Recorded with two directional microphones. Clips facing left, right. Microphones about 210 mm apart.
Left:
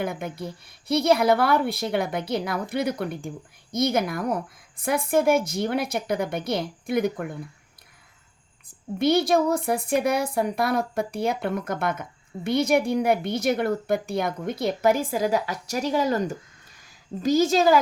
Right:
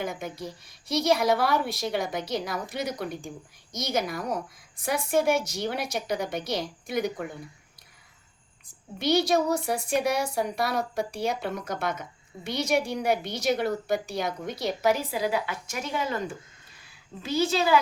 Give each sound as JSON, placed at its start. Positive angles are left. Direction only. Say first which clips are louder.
{"t": 0.0, "sound": "a woman's voice", "louder": "left 3 dB", "side_deg": 60}
{"t": 8.6, "sound": "a woman's voice", "louder": "left 6 dB", "side_deg": 55}